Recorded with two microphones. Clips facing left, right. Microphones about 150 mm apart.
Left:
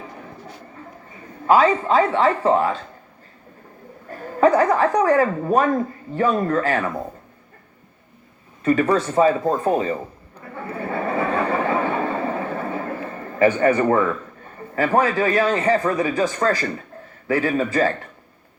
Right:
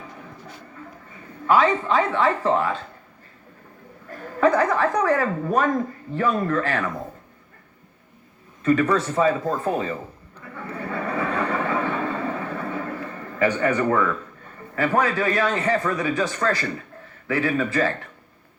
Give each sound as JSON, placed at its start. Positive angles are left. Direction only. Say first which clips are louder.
{"t": 1.5, "sound": "a woman's voice", "louder": "left 3 dB", "side_deg": 35}
{"t": 4.1, "sound": "a woman's voice", "louder": "left 3 dB", "side_deg": 35}
{"t": 8.6, "sound": "a woman's voice", "louder": "left 1 dB", "side_deg": 35}
{"t": 9.4, "sound": "speech", "louder": "left 4 dB", "side_deg": 25}
{"t": 10.4, "sound": "a sound", "louder": "left 3 dB", "side_deg": 30}
{"t": 13.6, "sound": "a woman's voice", "louder": "left 4 dB", "side_deg": 35}